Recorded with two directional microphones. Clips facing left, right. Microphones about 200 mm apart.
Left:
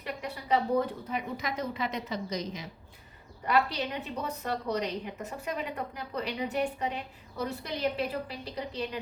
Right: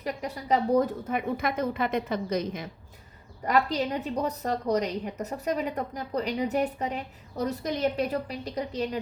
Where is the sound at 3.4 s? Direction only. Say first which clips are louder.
Right 3 dB; 40° right (ahead or behind).